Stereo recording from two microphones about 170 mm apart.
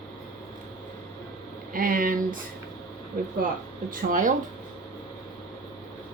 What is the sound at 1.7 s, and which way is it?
Speech, 55° right (ahead or behind).